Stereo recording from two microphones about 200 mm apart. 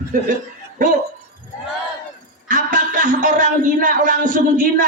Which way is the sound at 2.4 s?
40° right (ahead or behind).